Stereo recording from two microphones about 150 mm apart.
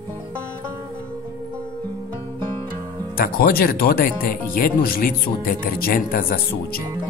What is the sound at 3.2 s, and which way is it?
Speech, 80° left.